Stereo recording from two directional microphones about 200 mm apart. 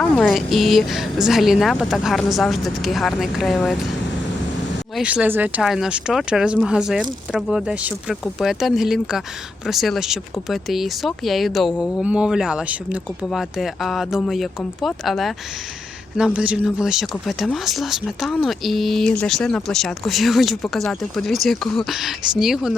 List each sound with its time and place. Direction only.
0.0 s speech: centre (ahead or behind)
4.9 s speech: 5° right (ahead or behind)